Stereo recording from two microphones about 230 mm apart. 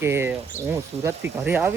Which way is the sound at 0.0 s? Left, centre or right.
Centre.